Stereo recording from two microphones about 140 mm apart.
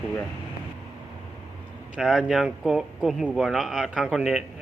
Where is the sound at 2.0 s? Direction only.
5° right (ahead or behind).